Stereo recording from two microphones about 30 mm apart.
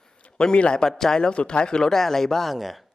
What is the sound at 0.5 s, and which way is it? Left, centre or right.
Speech, left.